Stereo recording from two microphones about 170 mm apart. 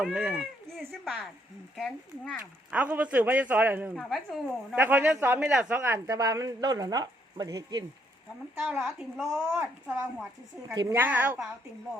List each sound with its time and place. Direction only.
0.0 s speech: 5° right (ahead or behind)
2.4 s a man's voice: 10° right (ahead or behind)
3.9 s speech: centre (ahead or behind)
4.8 s speech: 10° right (ahead or behind)
8.6 s a man's voice: centre (ahead or behind)